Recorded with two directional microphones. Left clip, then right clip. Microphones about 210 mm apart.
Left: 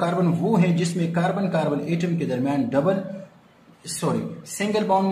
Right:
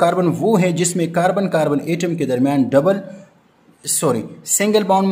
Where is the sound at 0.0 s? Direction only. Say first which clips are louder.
Right 8 dB; 55° right (ahead or behind).